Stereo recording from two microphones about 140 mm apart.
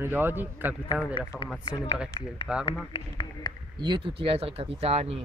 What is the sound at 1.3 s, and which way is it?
A man's voice, centre (ahead or behind).